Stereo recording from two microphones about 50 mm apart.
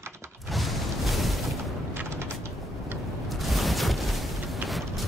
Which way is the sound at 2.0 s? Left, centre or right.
Right.